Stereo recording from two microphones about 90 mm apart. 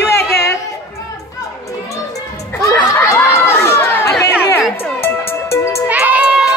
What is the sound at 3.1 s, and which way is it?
Crowd, 30° left (ahead or behind).